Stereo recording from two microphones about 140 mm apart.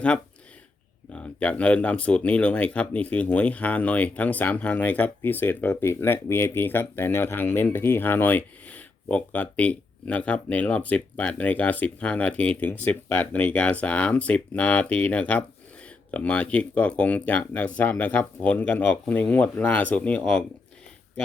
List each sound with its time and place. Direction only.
1.1 s speech: 10° left (ahead or behind)